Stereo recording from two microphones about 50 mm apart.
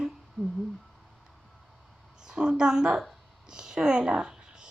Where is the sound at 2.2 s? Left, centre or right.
Centre.